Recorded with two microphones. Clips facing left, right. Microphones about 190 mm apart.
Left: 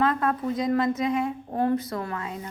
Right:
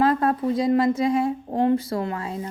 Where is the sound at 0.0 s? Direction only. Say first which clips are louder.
Right 4 dB; 35° right (ahead or behind).